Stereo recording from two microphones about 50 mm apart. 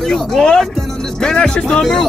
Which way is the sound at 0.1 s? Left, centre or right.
Centre.